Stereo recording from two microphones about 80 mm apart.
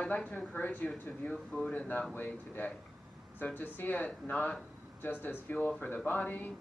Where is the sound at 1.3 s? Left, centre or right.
Centre.